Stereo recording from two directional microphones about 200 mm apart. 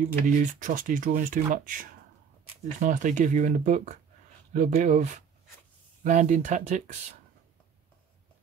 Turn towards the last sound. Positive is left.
turn(degrees=-35)  # may be behind; listen again after turning